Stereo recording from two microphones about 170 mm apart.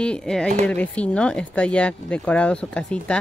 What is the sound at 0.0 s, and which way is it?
Speech, 5° left (ahead or behind).